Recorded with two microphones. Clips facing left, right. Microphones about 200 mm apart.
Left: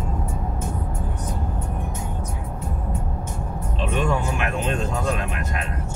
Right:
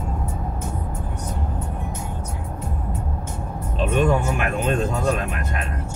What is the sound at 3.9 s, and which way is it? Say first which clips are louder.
Music: right 4 dB; 45° right (ahead or behind).